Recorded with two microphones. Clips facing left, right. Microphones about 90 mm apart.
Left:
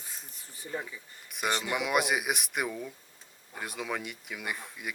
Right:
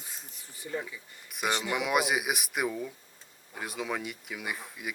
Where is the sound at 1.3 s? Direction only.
Centre (ahead or behind).